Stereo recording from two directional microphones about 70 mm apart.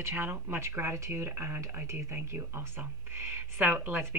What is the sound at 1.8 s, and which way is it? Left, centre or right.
Speech, right.